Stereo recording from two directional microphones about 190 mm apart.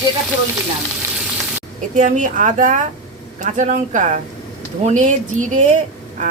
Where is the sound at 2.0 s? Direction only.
45° right (ahead or behind).